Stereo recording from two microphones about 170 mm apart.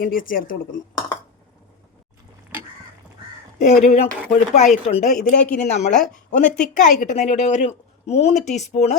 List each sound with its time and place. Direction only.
0.0 s a woman's voice: 55° left (ahead or behind)
3.6 s a woman's voice: 45° left (ahead or behind)
5.9 s speech: 5° left (ahead or behind)
6.7 s a woman's voice: 45° left (ahead or behind)